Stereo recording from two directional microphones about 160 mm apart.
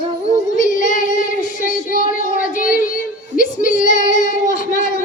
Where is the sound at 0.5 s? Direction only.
55° left (ahead or behind).